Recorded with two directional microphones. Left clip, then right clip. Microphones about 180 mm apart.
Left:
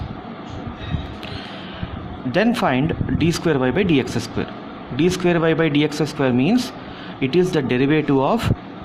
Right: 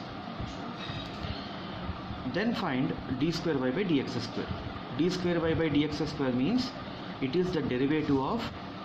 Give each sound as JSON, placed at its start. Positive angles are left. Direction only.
{"t": 2.3, "sound": "speech", "side_deg": 65}